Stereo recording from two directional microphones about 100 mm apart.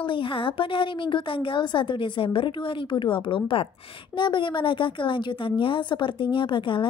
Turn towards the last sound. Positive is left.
turn(degrees=55)  # may be behind; listen again after turning